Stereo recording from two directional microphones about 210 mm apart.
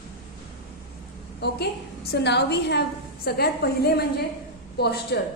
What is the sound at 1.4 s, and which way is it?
A woman's voice, 50° left (ahead or behind).